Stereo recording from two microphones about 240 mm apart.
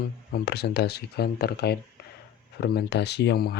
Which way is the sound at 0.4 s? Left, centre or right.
Left.